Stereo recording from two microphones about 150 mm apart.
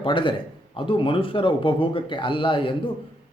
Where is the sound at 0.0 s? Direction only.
35° left (ahead or behind).